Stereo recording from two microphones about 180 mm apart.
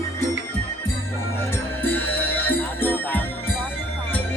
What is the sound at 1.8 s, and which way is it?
Music, 10° left (ahead or behind).